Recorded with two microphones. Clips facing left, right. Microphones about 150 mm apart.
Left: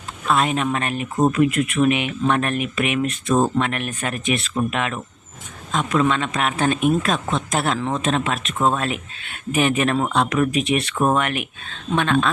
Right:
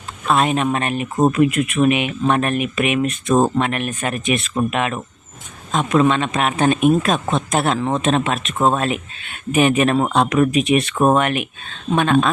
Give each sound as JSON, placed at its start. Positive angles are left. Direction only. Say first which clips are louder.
{"t": 0.3, "sound": "a man's voice", "louder": "right 3 dB", "side_deg": -20}